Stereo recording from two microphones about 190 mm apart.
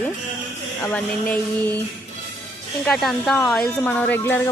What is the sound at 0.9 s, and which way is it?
Speech, 10° left (ahead or behind).